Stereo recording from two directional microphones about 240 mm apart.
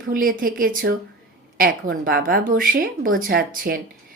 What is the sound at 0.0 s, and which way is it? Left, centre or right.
Speech, right.